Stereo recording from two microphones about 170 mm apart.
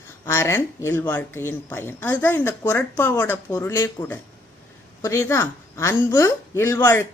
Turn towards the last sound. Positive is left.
turn(degrees=15)  # may be behind; listen again after turning